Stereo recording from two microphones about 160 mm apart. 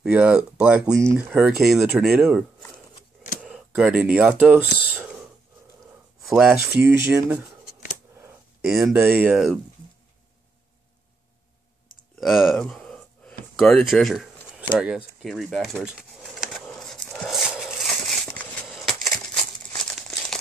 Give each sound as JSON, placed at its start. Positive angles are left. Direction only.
{"t": 0.0, "sound": "speech", "side_deg": -5}
{"t": 0.9, "sound": "speech", "side_deg": -20}
{"t": 1.3, "sound": "speech", "side_deg": 0}
{"t": 6.2, "sound": "speech", "side_deg": 0}
{"t": 6.7, "sound": "speech", "side_deg": -15}
{"t": 8.9, "sound": "speech", "side_deg": -10}
{"t": 12.2, "sound": "a sound", "side_deg": 0}
{"t": 13.6, "sound": "speech", "side_deg": 0}
{"t": 14.8, "sound": "a sound", "side_deg": -5}
{"t": 19.7, "sound": "crumpling", "side_deg": 5}